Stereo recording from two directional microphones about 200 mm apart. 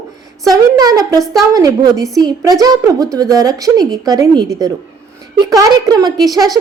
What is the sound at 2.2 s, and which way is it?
A woman's voice, 20° right (ahead or behind).